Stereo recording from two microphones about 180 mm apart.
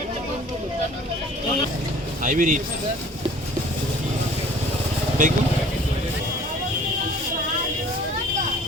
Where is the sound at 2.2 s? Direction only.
45° right (ahead or behind).